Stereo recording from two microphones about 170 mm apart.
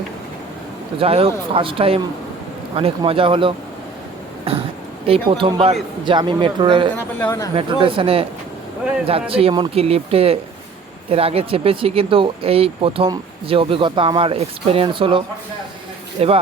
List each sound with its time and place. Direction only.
0.9 s speech: 35° right (ahead or behind)
6.9 s speech: 10° left (ahead or behind)
7.5 s speech: 30° right (ahead or behind)
9.3 s speech: 30° right (ahead or behind)